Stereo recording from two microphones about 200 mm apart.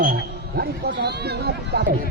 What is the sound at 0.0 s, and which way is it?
Speech, 50° right (ahead or behind).